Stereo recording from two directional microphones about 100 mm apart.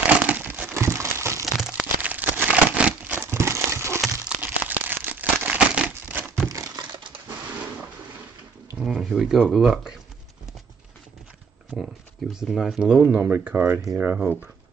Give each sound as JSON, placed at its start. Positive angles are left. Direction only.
{"t": 0.2, "sound": "crumpling", "side_deg": -15}
{"t": 1.8, "sound": "crumpling", "side_deg": -15}
{"t": 3.2, "sound": "a sound", "side_deg": -25}
{"t": 4.0, "sound": "crumpling", "side_deg": -10}
{"t": 6.5, "sound": "computer keyboard", "side_deg": -35}
{"t": 8.7, "sound": "a sound", "side_deg": -5}
{"t": 9.4, "sound": "speech", "side_deg": 0}
{"t": 11.7, "sound": "speech", "side_deg": -5}